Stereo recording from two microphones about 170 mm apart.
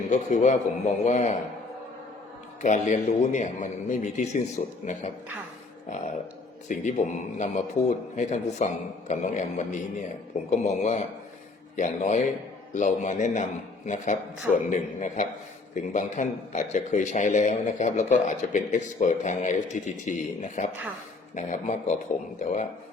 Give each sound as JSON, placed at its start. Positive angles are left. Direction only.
{"t": 0.1, "sound": "a man's voice", "side_deg": 45}
{"t": 2.6, "sound": "a man's voice", "side_deg": 45}
{"t": 6.7, "sound": "a man's voice", "side_deg": 45}